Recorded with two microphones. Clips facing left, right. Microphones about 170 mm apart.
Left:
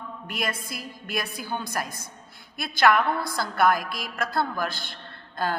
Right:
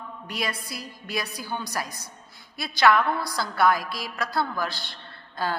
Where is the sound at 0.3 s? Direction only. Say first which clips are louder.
Even; 50° left (ahead or behind).